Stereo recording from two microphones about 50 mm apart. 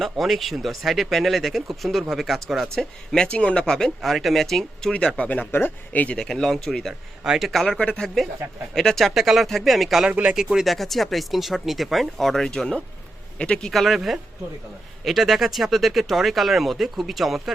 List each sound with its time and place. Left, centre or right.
0.0 s speech: centre
2.7 s speech: centre
3.2 s speech: left
3.7 s speech: centre; by 5.5 s left
5.5 s speech: left
6.1 s speech: centre
7.8 s speech: left
8.0 s speech: centre
9.1 s speech: centre
10.1 s speech: right
10.3 s speech: centre; by 13.7 s left
13.7 s speech: centre